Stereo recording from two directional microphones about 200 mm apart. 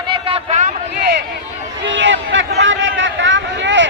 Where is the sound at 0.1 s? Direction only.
30° right (ahead or behind).